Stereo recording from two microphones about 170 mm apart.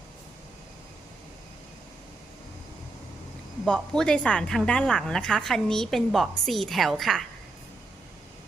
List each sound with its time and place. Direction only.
3.7 s a woman's voice: 5° left (ahead or behind)